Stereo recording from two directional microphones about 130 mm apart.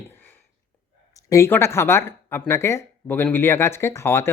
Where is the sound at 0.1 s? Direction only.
15° left (ahead or behind).